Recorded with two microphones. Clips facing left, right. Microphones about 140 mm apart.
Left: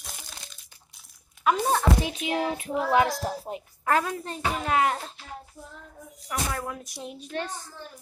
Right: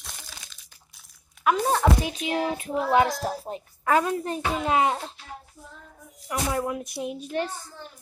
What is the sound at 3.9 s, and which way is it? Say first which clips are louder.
Speech: right 3 dB; 5° right (ahead or behind).